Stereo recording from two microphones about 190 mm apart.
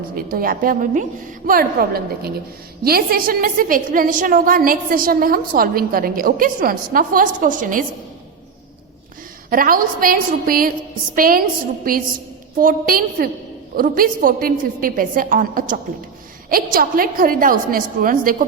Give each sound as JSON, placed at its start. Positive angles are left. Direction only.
{"t": 0.2, "sound": "a woman's voice", "side_deg": -50}
{"t": 9.5, "sound": "a woman's voice", "side_deg": -50}
{"t": 12.5, "sound": "a woman's voice", "side_deg": -45}